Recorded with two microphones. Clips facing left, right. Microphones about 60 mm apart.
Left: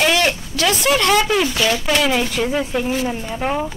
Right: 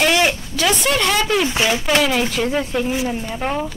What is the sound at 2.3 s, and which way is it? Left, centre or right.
Speech, centre.